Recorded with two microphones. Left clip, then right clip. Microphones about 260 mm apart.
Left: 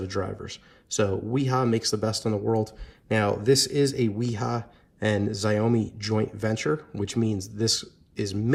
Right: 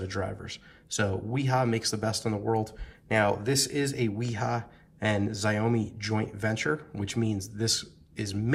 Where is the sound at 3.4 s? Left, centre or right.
Left.